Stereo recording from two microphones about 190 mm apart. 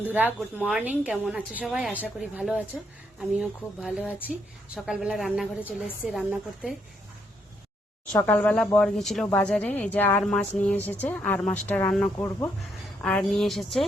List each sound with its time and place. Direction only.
0.0 s a woman's voice: 10° right (ahead or behind)
8.1 s a woman's voice: 10° left (ahead or behind)